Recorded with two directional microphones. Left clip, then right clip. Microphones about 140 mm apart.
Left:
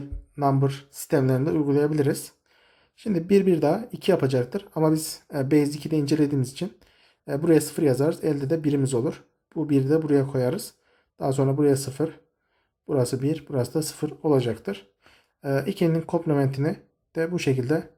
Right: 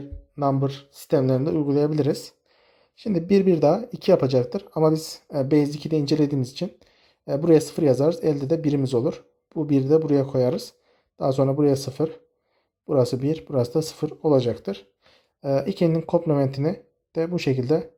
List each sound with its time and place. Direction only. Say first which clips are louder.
0.3 s speech: even; 30° right (ahead or behind)